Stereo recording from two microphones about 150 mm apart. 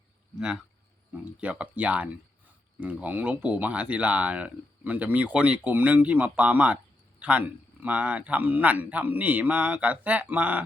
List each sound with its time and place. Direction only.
0.3 s speech: 5° right (ahead or behind)